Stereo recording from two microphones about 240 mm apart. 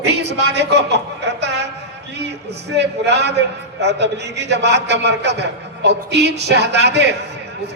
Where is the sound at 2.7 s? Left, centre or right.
Right.